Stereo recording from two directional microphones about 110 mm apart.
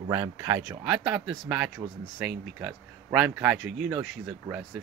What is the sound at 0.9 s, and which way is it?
Speech, 10° right (ahead or behind).